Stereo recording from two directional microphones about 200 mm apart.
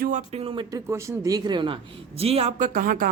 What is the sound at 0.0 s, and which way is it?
Speech, 35° right (ahead or behind).